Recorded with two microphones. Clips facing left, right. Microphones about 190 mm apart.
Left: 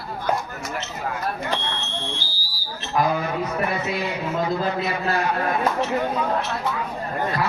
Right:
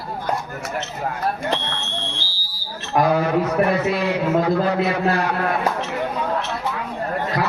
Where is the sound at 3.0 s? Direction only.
65° right (ahead or behind).